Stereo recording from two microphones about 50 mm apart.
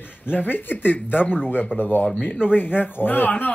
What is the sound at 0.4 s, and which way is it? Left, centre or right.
Speech, left.